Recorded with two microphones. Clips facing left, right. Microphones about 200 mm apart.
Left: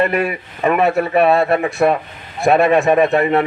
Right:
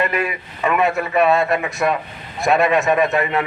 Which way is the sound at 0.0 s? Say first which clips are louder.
Left 4 dB; 40° left (ahead or behind).